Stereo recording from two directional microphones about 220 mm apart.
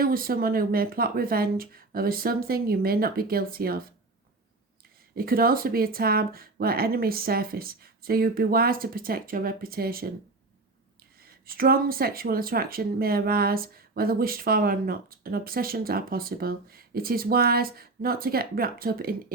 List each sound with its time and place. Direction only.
0.0 s speech: 40° right (ahead or behind)
5.1 s speech: 40° right (ahead or behind)
11.2 s speech: 40° right (ahead or behind)